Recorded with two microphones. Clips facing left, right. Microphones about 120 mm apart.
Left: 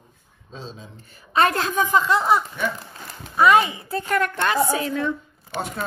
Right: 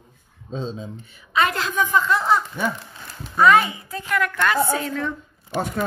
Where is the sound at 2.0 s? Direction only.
25° left (ahead or behind).